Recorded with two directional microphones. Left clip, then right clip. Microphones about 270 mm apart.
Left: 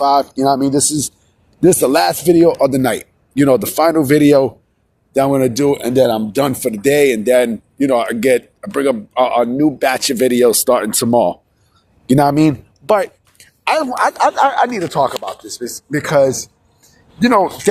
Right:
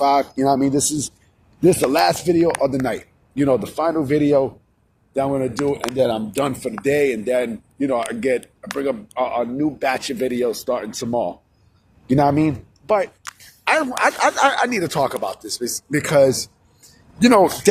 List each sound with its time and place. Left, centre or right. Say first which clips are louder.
0.0 s speech: left 4 dB; centre; by 13.1 s left
13.7 s speech: left 3 dB; centre